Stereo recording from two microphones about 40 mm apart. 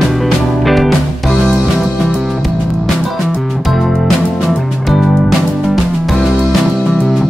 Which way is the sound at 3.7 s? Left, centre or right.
Centre.